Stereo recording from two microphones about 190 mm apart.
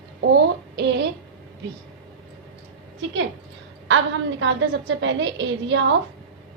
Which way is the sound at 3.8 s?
75° right (ahead or behind).